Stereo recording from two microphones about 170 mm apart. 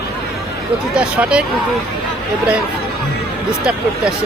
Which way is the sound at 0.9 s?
5° right (ahead or behind).